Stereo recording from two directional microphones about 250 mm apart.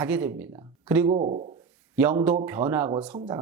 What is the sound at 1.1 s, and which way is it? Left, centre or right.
Speech, right.